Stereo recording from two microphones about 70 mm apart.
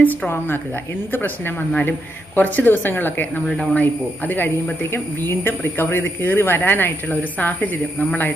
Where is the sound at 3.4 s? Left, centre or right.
Centre.